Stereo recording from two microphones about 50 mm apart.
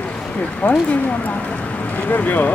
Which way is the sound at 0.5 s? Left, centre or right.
Left.